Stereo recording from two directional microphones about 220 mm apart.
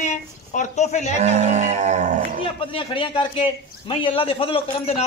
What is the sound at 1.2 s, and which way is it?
Livestock, 30° right (ahead or behind).